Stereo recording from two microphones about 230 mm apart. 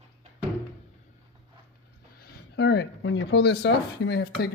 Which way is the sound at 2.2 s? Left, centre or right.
Left.